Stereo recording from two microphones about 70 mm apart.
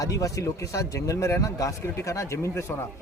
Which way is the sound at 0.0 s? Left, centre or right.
Left.